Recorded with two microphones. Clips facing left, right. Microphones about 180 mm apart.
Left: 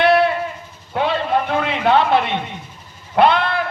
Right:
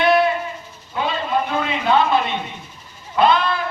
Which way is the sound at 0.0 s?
70° left (ahead or behind).